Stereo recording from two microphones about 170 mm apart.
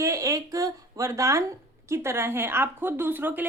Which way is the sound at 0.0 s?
20° right (ahead or behind).